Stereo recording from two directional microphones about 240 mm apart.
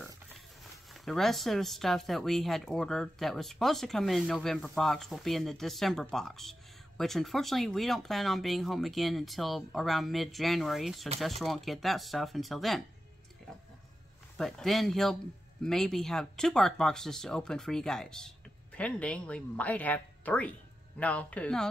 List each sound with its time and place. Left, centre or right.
1.0 s speech: centre
14.3 s speech: centre